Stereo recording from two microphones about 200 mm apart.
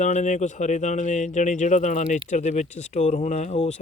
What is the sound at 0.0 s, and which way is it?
Speech, 35° left (ahead or behind).